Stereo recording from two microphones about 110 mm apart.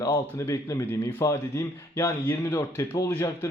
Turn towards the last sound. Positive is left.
turn(degrees=25)  # may be behind; listen again after turning